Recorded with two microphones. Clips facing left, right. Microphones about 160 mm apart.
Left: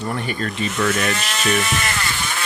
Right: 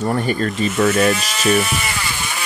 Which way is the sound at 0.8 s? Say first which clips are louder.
Right 5 dB; 55° right (ahead or behind).